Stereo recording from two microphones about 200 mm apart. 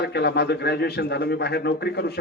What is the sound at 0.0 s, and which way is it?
A man's voice, 55° left (ahead or behind).